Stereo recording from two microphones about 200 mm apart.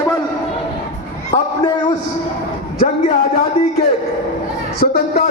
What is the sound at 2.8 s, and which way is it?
Speech, 50° left (ahead or behind).